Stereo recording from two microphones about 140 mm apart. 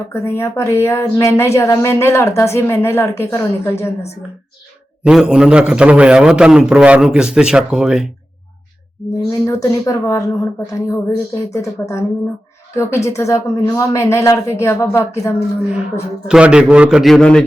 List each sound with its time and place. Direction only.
0.1 s speech: 20° left (ahead or behind)
5.0 s a man's voice: 5° right (ahead or behind)
9.5 s speech: 25° left (ahead or behind)
16.2 s a man's voice: 5° right (ahead or behind)